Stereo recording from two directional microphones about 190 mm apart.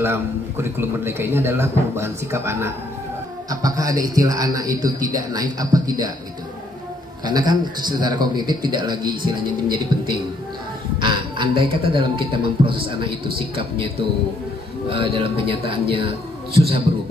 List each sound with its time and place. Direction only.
0.0 s a man's voice: 10° right (ahead or behind)
7.2 s a man's voice: 20° right (ahead or behind)
14.9 s a man's voice: 30° right (ahead or behind)